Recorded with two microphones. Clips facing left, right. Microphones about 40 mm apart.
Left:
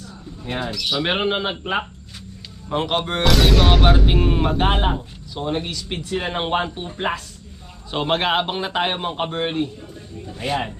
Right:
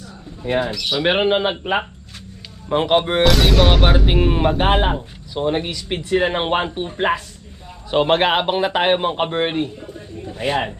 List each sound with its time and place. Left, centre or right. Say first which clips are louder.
0.0 s speech: right 4 dB; centre
3.2 s a man's voice: left 3 dB; centre